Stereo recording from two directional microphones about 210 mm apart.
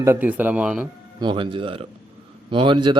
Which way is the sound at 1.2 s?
25° right (ahead or behind).